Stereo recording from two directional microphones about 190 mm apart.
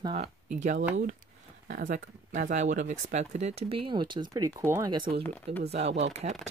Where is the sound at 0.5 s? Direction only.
40° right (ahead or behind); by 5.0 s 15° right (ahead or behind).